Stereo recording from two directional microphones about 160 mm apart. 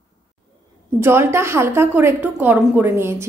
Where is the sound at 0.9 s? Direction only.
15° right (ahead or behind).